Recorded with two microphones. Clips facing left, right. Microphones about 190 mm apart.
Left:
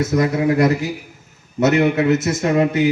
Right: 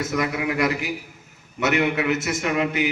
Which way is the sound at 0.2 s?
40° left (ahead or behind).